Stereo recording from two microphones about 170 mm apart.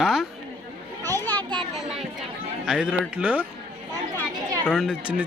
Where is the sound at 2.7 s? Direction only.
5° right (ahead or behind).